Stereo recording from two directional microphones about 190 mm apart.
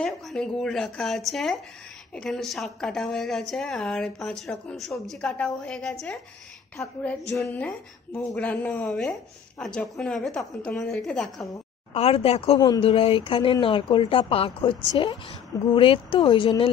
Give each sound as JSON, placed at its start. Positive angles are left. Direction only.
{"t": 0.0, "sound": "a woman's voice", "side_deg": 0}
{"t": 11.9, "sound": "speech", "side_deg": 30}